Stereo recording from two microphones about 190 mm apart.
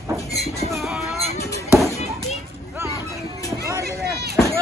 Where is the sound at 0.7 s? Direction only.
Centre (ahead or behind).